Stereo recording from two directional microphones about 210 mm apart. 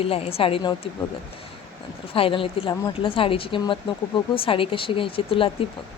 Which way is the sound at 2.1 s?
25° left (ahead or behind).